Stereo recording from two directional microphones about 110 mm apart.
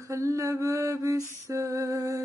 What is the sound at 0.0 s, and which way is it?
Mantra, 30° right (ahead or behind).